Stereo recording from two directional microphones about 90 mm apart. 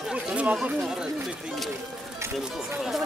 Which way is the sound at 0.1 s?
15° right (ahead or behind).